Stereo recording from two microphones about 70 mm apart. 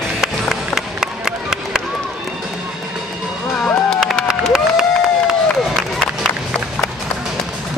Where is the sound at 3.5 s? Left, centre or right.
Left.